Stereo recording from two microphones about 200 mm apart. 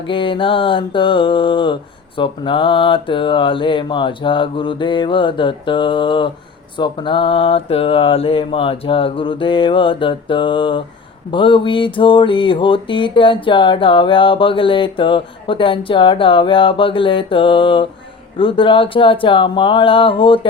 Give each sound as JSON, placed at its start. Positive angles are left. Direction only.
{"t": 0.1, "sound": "mantra", "side_deg": 25}